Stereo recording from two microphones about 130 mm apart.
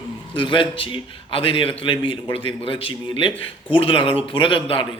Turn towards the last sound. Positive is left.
turn(degrees=40)  # may be behind; listen again after turning